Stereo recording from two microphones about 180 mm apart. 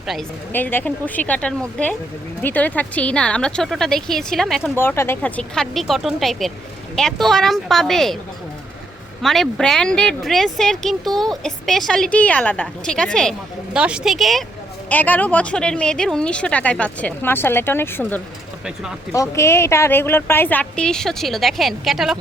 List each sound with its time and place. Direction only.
0.0 s a woman's voice: centre (ahead or behind)
0.5 s speech: 10° left (ahead or behind)
4.7 s speech: 15° left (ahead or behind)
9.2 s speech: centre (ahead or behind)